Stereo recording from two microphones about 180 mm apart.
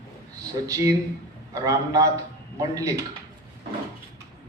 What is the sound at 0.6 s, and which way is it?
A man's voice, 20° right (ahead or behind).